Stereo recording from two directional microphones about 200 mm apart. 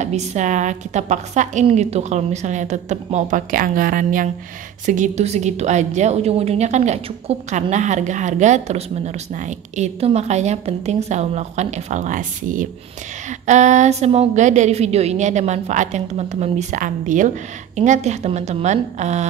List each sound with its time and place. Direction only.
0.0 s a woman's voice: 35° right (ahead or behind)